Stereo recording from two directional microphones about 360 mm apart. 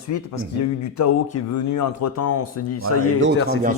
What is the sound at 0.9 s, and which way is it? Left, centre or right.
Speech, left.